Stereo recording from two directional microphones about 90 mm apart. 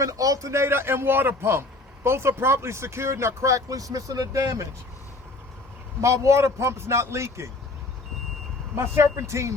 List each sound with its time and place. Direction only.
0.0 s a man's voice: 40° right (ahead or behind)
6.0 s speech: 35° right (ahead or behind)
8.7 s speech: 30° right (ahead or behind)